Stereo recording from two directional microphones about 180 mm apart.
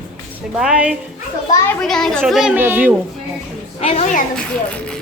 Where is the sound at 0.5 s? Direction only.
5° right (ahead or behind).